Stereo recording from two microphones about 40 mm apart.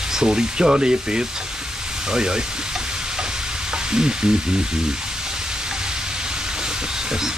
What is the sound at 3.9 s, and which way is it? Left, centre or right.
Speech, centre.